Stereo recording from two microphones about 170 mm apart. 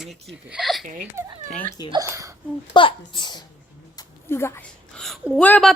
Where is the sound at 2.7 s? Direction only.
30° left (ahead or behind).